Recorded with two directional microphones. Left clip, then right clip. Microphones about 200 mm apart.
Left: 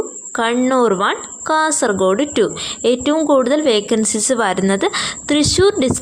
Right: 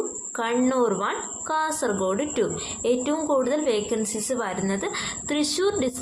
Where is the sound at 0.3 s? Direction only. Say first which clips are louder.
Left 8 dB; 40° left (ahead or behind).